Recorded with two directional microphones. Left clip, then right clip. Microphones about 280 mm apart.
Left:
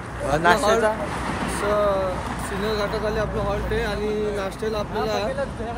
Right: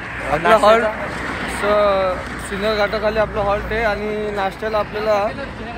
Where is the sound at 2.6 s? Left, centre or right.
Right.